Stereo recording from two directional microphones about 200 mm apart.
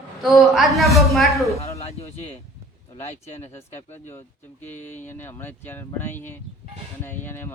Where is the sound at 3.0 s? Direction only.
35° left (ahead or behind).